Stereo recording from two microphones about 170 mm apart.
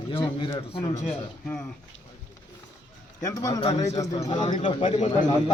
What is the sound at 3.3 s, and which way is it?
Speech, 20° left (ahead or behind).